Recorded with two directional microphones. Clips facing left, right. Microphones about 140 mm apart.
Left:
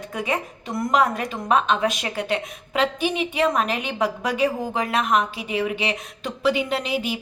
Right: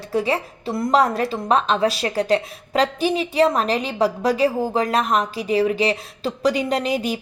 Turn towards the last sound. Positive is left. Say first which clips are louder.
# right 4 dB
turn(degrees=-40)  # may be behind; listen again after turning